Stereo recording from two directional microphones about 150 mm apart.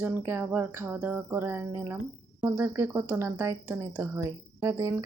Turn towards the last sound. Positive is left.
turn(degrees=-20)  # may be behind; listen again after turning